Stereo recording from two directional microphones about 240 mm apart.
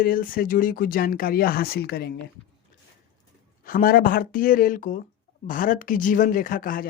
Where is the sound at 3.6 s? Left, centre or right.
Left.